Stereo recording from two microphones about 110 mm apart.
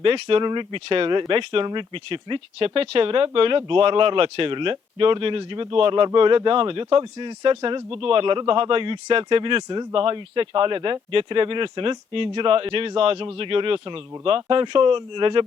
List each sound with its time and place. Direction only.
0.0 s speech: 55° right (ahead or behind)